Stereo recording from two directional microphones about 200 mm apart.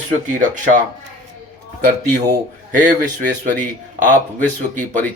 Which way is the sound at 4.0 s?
40° right (ahead or behind).